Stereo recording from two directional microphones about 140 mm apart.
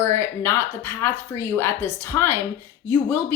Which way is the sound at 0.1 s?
20° left (ahead or behind).